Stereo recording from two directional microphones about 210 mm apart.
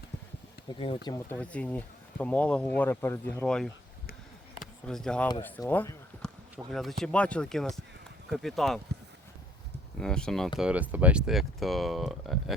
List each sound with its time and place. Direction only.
0.7 s speech: 25° left (ahead or behind)
1.0 s speech: 15° left (ahead or behind)
4.9 s speech: centre (ahead or behind)
10.0 s speech: 5° left (ahead or behind)